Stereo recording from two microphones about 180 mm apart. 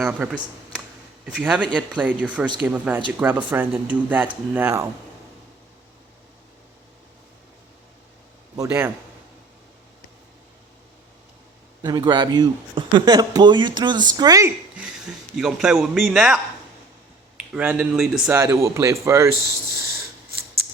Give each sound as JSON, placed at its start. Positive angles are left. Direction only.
{"t": 0.0, "sound": "speech", "side_deg": -5}
{"t": 8.5, "sound": "a man's voice", "side_deg": -15}
{"t": 11.8, "sound": "speech", "side_deg": -25}
{"t": 14.8, "sound": "speech", "side_deg": -5}
{"t": 17.5, "sound": "speech", "side_deg": -5}